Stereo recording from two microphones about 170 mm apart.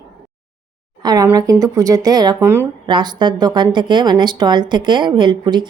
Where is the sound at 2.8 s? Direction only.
30° right (ahead or behind).